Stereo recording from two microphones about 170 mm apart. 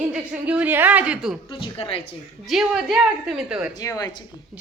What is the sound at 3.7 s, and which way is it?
Speech, 20° left (ahead or behind).